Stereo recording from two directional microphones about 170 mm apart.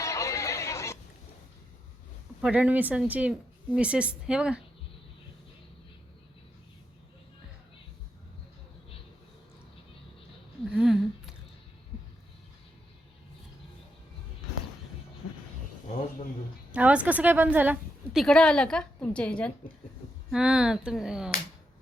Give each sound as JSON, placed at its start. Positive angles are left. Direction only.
{"t": 0.0, "sound": "music", "side_deg": 20}
{"t": 2.4, "sound": "a woman's voice", "side_deg": -5}
{"t": 10.7, "sound": "a sound", "side_deg": -5}
{"t": 16.7, "sound": "a woman's voice", "side_deg": -10}
{"t": 18.2, "sound": "a woman's voice", "side_deg": 5}
{"t": 20.3, "sound": "a woman's voice", "side_deg": -5}